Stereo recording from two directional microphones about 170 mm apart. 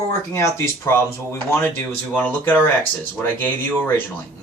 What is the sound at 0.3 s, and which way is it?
Speech, 15° left (ahead or behind).